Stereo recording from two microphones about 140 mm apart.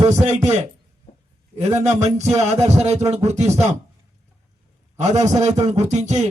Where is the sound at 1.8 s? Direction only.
50° right (ahead or behind).